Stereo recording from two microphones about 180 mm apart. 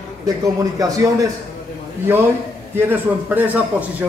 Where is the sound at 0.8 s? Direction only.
20° right (ahead or behind).